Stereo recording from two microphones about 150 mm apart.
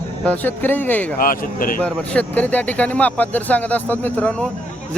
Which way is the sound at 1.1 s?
70° left (ahead or behind).